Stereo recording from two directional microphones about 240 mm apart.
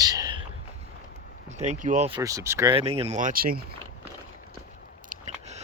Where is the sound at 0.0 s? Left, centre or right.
Centre.